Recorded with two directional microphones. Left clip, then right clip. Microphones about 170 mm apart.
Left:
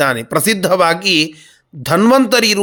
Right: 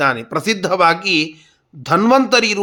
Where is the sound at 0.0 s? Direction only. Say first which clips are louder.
Left 2 dB; 20° left (ahead or behind).